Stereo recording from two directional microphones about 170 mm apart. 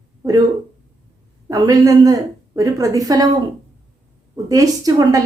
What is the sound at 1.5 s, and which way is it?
A woman's voice, 20° right (ahead or behind).